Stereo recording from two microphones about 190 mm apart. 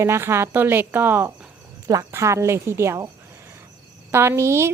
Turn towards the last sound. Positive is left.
turn(degrees=-15)  # may be behind; listen again after turning